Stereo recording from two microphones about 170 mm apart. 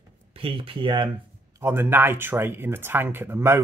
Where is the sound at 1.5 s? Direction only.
15° right (ahead or behind).